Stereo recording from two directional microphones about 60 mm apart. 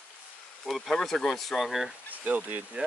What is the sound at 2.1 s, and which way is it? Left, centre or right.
Speech, right.